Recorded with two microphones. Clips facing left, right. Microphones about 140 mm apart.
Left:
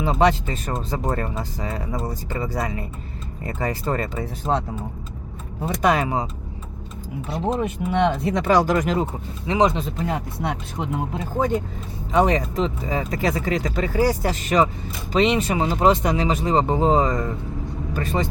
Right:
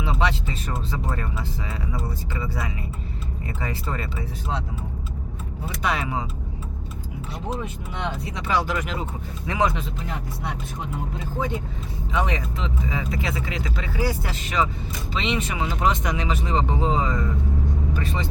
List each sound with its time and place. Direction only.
0.0 s speech: 45° left (ahead or behind)
5.6 s speech: 45° left (ahead or behind)
7.6 s speech: 70° left (ahead or behind); by 9.0 s 40° left (ahead or behind)
9.5 s speech: 20° left (ahead or behind)
10.1 s speech: 65° left (ahead or behind)
11.3 s speech: 50° left (ahead or behind)